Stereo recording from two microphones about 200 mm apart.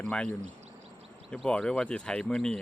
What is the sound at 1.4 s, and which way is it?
Speech, 5° left (ahead or behind).